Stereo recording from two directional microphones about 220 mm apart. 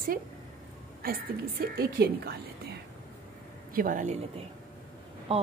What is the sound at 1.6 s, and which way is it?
A woman's voice, 45° right (ahead or behind).